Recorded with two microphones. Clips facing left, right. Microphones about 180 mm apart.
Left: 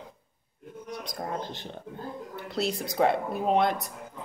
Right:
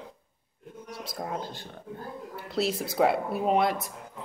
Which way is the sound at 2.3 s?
Centre (ahead or behind).